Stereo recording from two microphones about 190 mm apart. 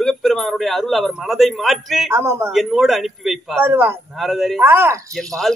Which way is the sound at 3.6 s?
10° right (ahead or behind).